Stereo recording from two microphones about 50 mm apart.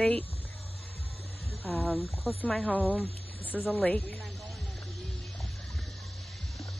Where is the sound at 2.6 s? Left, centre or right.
Left.